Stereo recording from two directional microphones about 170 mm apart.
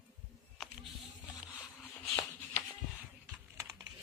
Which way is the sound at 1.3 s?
15° left (ahead or behind).